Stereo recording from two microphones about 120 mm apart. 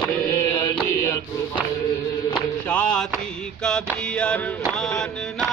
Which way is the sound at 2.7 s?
15° left (ahead or behind).